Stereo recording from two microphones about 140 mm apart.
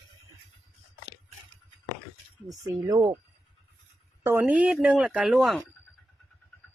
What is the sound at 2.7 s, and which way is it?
Speech, 30° right (ahead or behind).